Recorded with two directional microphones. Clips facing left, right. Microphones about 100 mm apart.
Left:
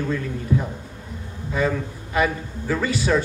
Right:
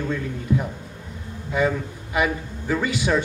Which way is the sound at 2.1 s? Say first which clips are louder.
Left 1 dB; 15° right (ahead or behind).